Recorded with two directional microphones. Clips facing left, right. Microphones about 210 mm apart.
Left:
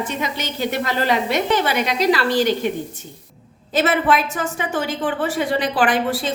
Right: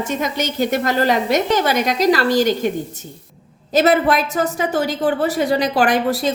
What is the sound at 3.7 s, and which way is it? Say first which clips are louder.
A woman's voice: right 3 dB; 40° right (ahead or behind).